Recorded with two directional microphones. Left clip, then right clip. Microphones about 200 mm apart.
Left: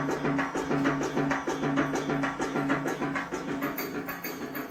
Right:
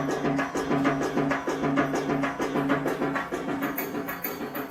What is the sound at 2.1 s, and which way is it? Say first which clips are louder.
Music: right 2 dB; 5° right (ahead or behind).